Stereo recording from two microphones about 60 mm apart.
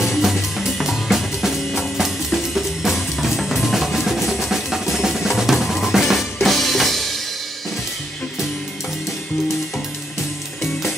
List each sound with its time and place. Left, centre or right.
0.0 s drum kit: centre
10.6 s music: centre